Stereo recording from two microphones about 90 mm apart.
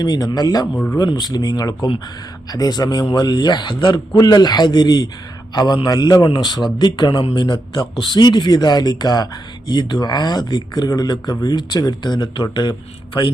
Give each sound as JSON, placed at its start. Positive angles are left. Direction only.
{"t": 0.0, "sound": "a man's voice", "side_deg": 50}
{"t": 3.2, "sound": "a man's voice", "side_deg": 50}